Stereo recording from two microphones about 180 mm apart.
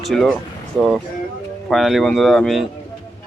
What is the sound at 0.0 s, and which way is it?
Speech, centre (ahead or behind).